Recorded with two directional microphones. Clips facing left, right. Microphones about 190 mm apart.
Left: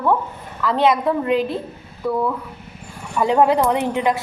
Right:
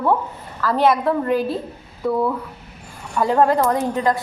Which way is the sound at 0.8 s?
20° left (ahead or behind).